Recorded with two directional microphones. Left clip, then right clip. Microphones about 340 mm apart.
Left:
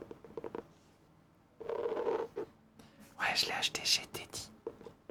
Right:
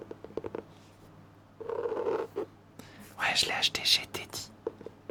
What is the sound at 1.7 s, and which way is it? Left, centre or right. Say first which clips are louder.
Purr: right 3 dB; centre.